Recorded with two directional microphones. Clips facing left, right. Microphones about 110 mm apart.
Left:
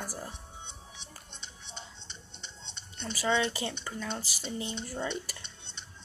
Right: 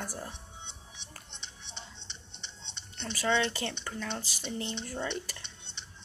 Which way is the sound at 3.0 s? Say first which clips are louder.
Even; 10° left (ahead or behind).